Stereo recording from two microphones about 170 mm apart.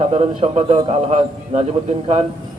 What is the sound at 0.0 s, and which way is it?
A man's voice, 35° right (ahead or behind).